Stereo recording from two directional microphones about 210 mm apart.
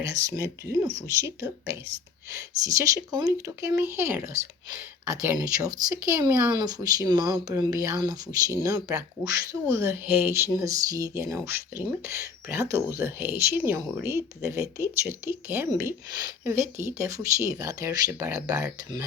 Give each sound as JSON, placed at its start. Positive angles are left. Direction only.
{"t": 0.0, "sound": "speech", "side_deg": -15}
{"t": 2.3, "sound": "speech", "side_deg": -15}